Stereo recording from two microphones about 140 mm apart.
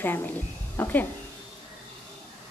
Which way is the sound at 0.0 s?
15° left (ahead or behind).